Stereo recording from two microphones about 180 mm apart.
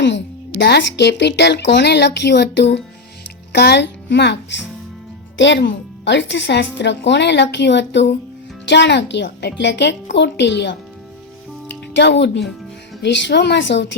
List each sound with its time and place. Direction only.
0.0 s a child's voice: 80° left
11.9 s speech: 75° left (ahead or behind)